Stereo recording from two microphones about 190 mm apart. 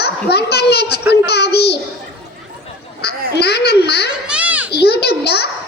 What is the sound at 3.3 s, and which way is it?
Speech, 60° left (ahead or behind).